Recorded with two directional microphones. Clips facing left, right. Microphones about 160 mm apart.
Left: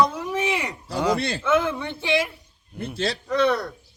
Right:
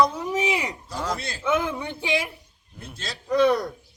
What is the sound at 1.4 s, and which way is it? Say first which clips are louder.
Speech: even; 10° right (ahead or behind).